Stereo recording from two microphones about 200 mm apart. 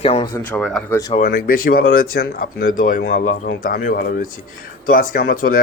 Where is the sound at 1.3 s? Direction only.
45° left (ahead or behind).